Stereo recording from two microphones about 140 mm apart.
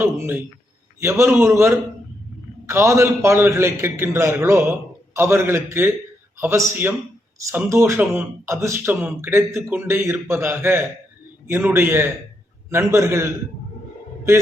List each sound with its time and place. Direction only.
0.0 s a man's voice: 15° right (ahead or behind)